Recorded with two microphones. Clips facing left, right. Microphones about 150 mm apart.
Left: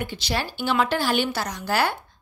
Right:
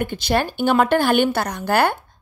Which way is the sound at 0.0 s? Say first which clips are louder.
Right 7 dB; 55° right (ahead or behind).